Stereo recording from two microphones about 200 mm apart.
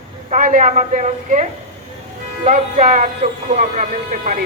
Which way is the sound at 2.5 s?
40° right (ahead or behind).